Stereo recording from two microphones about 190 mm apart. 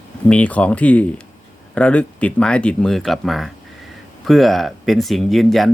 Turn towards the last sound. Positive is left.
turn(degrees=0)  # may be behind; listen again after turning